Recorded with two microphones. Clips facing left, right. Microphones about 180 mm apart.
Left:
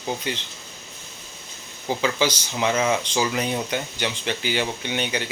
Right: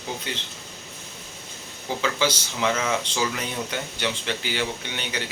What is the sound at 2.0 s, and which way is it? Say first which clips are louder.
Speech: left 1 dB; 15° left (ahead or behind).